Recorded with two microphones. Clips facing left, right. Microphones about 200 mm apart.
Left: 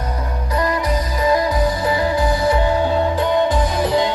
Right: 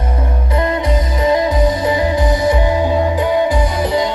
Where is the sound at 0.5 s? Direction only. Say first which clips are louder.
Right 3 dB; 25° right (ahead or behind).